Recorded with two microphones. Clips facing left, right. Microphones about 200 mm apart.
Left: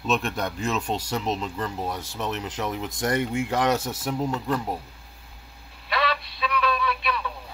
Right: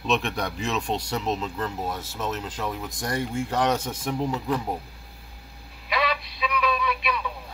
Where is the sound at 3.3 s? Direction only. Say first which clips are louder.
Left 1 dB; 10° left (ahead or behind).